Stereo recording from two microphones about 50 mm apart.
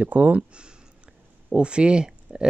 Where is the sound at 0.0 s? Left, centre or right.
Right.